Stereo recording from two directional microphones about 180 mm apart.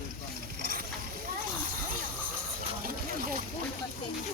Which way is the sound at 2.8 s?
55° right (ahead or behind).